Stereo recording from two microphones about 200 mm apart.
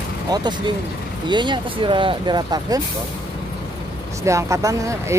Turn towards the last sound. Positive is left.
turn(degrees=-15)  # may be behind; listen again after turning